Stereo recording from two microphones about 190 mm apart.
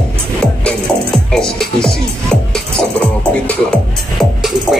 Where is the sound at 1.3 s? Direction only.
Centre (ahead or behind).